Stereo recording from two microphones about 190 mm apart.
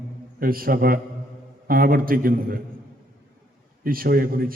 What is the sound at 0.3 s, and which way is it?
A man's voice, 50° right (ahead or behind).